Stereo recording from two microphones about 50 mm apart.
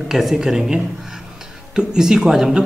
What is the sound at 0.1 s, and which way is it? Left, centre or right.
A man's voice, centre.